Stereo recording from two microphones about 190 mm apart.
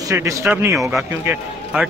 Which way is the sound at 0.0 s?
15° right (ahead or behind).